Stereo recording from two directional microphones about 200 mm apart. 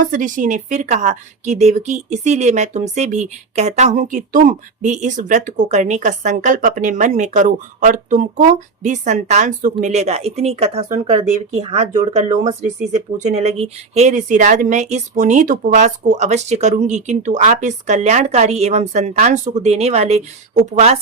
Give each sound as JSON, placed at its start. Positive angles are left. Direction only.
{"t": 0.0, "sound": "a woman's voice", "side_deg": -40}